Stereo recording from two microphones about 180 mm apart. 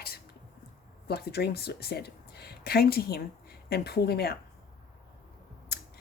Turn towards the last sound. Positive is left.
turn(degrees=60)  # may be behind; listen again after turning